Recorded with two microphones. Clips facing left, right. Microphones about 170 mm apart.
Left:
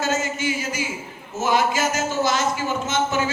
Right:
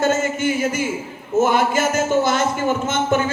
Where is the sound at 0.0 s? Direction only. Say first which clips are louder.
Right 5 dB; 55° right (ahead or behind).